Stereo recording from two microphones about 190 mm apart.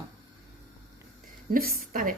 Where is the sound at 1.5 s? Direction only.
50° right (ahead or behind).